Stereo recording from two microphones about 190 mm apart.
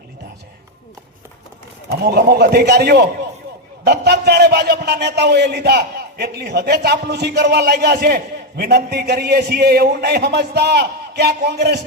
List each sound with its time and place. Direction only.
1.9 s a man's voice: 60° right (ahead or behind)